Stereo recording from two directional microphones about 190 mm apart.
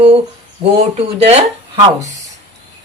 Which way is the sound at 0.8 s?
30° right (ahead or behind).